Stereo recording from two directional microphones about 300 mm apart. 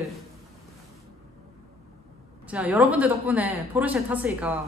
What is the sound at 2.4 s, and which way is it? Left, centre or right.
Speech, centre.